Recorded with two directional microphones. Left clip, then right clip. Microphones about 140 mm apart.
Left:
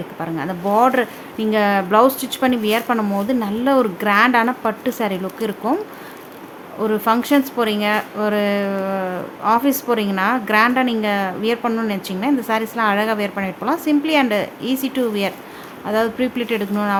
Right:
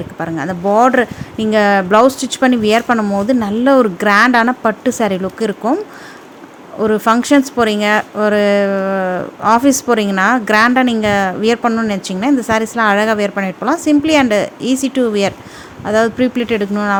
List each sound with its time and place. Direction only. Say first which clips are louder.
0.2 s speech: right 5 dB; 30° right (ahead or behind)